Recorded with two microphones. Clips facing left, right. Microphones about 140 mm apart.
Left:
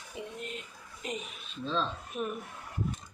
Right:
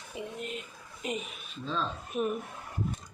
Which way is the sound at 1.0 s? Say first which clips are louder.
Right 3 dB; 10° right (ahead or behind).